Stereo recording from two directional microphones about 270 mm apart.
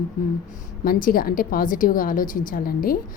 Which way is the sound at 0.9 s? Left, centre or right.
Left.